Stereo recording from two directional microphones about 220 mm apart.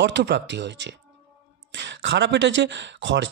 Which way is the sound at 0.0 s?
50° right (ahead or behind).